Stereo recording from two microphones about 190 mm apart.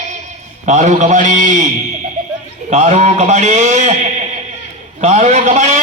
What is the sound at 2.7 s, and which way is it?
A man's voice, 35° right (ahead or behind).